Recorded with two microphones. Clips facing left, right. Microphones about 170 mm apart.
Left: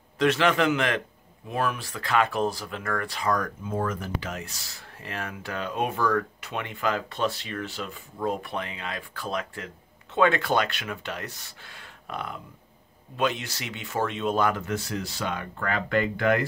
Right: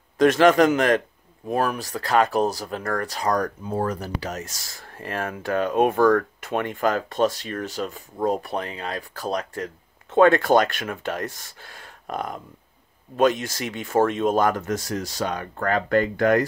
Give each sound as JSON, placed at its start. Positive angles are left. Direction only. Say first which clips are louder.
{"t": 0.2, "sound": "speech", "louder": "right 7 dB", "side_deg": -45}